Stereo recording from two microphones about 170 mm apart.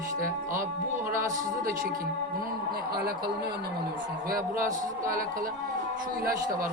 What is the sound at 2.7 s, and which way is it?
A woman's voice, 65° right (ahead or behind).